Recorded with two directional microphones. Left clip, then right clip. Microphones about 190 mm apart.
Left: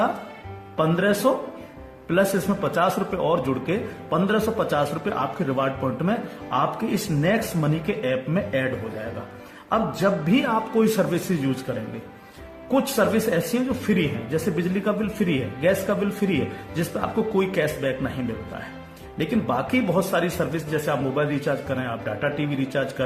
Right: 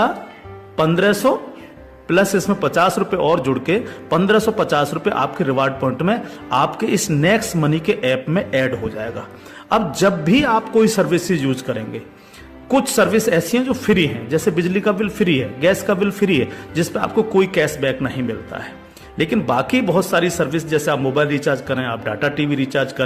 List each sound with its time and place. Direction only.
0.8 s a man's voice: 50° right (ahead or behind)
12.7 s a man's voice: 50° right (ahead or behind)
19.1 s a man's voice: 55° right (ahead or behind)